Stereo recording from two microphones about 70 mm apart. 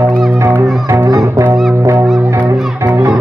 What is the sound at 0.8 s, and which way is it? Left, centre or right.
Music, right.